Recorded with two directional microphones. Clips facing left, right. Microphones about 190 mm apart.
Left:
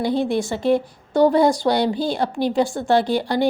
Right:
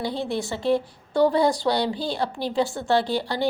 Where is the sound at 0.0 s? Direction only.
50° left (ahead or behind).